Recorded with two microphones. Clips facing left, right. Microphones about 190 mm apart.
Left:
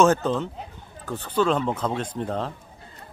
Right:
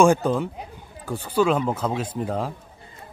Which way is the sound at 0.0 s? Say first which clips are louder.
Right 2 dB; 10° right (ahead or behind).